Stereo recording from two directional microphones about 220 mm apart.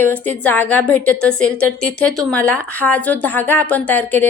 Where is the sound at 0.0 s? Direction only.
10° left (ahead or behind).